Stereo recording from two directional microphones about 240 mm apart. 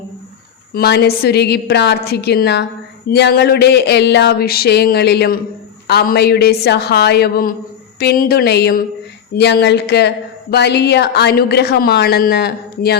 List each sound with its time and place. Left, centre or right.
0.7 s a woman's voice: left